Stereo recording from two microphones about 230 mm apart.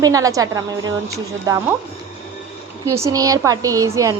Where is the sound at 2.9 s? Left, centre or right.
Centre.